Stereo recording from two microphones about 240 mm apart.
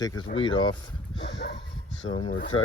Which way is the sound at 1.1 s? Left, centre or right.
Left.